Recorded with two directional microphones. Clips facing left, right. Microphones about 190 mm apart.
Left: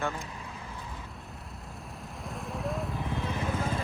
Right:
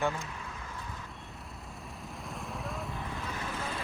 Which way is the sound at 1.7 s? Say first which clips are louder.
Left 1 dB; centre (ahead or behind).